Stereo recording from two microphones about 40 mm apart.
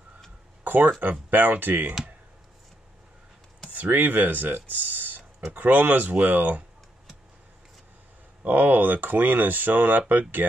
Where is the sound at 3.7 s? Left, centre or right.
Right.